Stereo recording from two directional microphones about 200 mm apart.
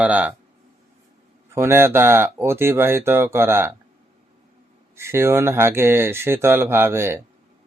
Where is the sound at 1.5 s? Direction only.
10° right (ahead or behind).